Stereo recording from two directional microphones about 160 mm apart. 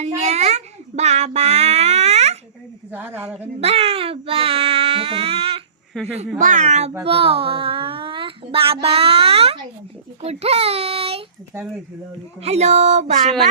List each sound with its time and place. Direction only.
0.0 s child singing: 45° right (ahead or behind)
2.9 s speech: 10° right (ahead or behind)
3.6 s baby cry: 40° right (ahead or behind)
6.0 s a child's voice: centre (ahead or behind)
6.4 s speech: 50° right (ahead or behind)
7.0 s a child's voice: 35° right (ahead or behind)
12.4 s speech: 45° right (ahead or behind)